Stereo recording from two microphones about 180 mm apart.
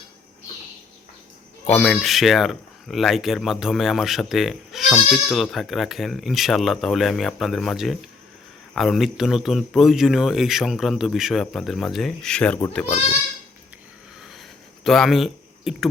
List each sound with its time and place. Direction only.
1.6 s speech: 10° left (ahead or behind)
12.8 s speech: 35° left (ahead or behind)
14.8 s speech: centre (ahead or behind)